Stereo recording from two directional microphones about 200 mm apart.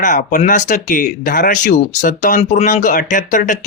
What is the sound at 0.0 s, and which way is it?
Speech, 40° left (ahead or behind).